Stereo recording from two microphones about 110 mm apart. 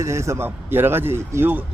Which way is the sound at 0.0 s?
25° right (ahead or behind).